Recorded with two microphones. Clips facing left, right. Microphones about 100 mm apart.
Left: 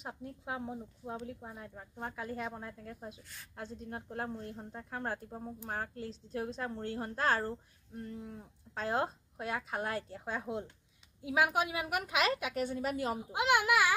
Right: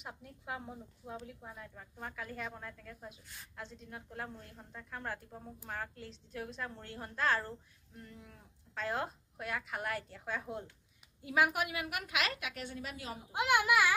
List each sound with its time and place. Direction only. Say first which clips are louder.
0.0 s a woman's voice: left 5 dB; 25° left (ahead or behind)
11.9 s a woman's voice: left 5 dB; 35° left (ahead or behind)
13.3 s a child's voice: even; 15° left (ahead or behind)